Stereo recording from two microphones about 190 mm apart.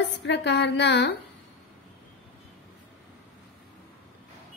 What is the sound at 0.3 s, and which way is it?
Speech, 65° left (ahead or behind).